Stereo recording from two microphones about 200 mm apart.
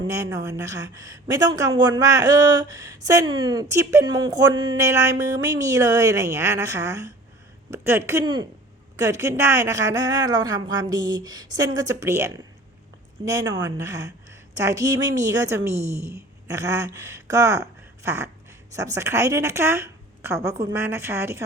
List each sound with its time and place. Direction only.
0.1 s a woman's voice: 15° right (ahead or behind)